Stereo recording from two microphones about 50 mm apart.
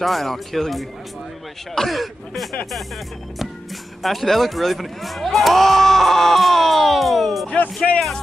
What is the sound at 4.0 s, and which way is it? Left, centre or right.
Speech, centre.